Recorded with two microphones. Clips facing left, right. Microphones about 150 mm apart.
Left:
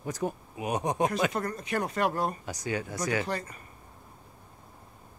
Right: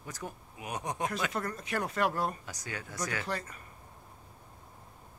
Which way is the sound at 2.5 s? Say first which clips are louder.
Left 9 dB; 20° left (ahead or behind).